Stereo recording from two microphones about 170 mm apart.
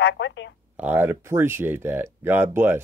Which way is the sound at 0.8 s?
10° right (ahead or behind).